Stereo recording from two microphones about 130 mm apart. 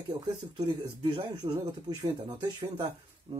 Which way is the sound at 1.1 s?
35° right (ahead or behind).